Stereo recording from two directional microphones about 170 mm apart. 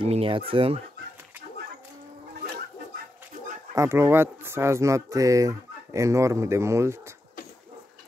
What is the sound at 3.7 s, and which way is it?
Speech, 15° right (ahead or behind).